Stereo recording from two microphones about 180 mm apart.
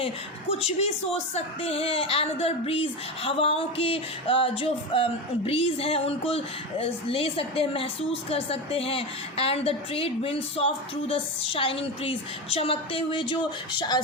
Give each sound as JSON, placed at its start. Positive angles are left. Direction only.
{"t": 0.6, "sound": "speech", "side_deg": 35}